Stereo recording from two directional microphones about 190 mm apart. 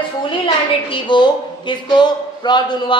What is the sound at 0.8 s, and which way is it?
A woman's voice, 25° left (ahead or behind).